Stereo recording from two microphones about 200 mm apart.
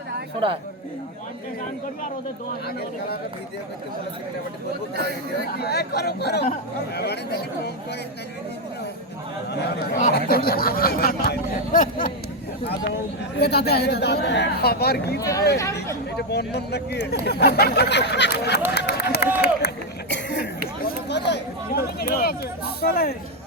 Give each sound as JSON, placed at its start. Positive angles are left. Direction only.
{"t": 0.3, "sound": "a woman's voice", "side_deg": -25}
{"t": 5.5, "sound": "speech", "side_deg": 55}
{"t": 9.5, "sound": "speech", "side_deg": 55}
{"t": 13.4, "sound": "speech", "side_deg": 55}
{"t": 15.2, "sound": "speech", "side_deg": 15}
{"t": 16.1, "sound": "speech", "side_deg": 55}
{"t": 18.7, "sound": "run", "side_deg": 55}
{"t": 19.4, "sound": "a sound", "side_deg": 55}
{"t": 22.8, "sound": "speech", "side_deg": 50}